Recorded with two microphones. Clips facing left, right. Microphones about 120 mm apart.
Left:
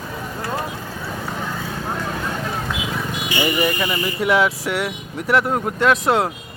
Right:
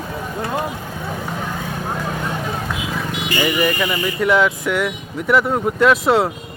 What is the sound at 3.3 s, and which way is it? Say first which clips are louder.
Speech: right 2 dB; 10° left (ahead or behind).